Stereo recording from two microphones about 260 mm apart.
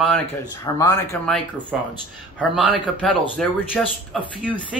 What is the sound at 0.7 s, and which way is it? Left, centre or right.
Speech, centre.